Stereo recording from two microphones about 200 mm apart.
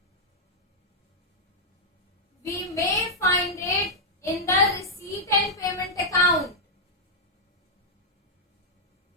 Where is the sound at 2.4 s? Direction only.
15° left (ahead or behind).